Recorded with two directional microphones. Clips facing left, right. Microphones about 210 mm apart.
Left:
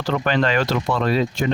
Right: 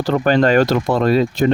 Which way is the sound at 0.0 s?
40° right (ahead or behind).